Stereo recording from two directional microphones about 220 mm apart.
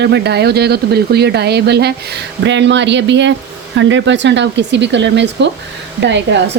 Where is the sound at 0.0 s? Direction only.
50° right (ahead or behind).